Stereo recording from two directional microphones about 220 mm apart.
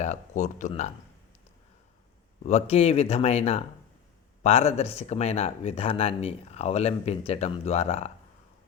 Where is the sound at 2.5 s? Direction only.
30° left (ahead or behind).